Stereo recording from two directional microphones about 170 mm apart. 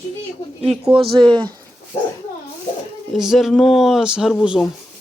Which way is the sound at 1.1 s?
25° right (ahead or behind).